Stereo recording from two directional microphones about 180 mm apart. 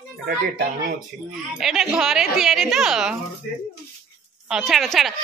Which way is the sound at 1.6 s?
Centre (ahead or behind).